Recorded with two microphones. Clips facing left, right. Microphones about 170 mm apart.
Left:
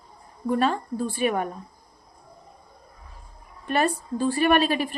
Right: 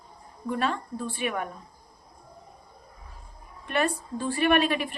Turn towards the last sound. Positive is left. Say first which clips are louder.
# left 2 dB
turn(degrees=35)  # may be behind; listen again after turning